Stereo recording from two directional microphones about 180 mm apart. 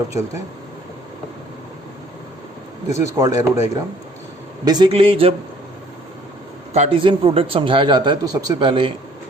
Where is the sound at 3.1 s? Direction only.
20° right (ahead or behind).